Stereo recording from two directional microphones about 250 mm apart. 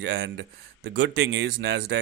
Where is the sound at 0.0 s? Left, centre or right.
Right.